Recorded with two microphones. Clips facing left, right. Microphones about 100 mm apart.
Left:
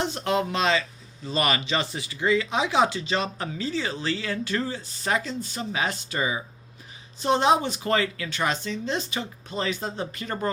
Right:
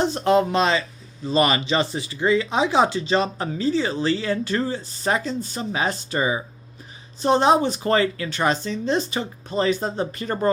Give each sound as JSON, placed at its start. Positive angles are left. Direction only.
{"t": 0.0, "sound": "speech", "side_deg": -35}